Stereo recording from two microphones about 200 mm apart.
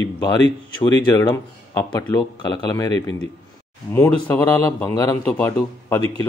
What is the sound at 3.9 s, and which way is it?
Speech, 10° left (ahead or behind).